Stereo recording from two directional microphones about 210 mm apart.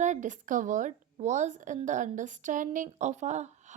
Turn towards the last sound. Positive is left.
turn(degrees=-35)  # may be behind; listen again after turning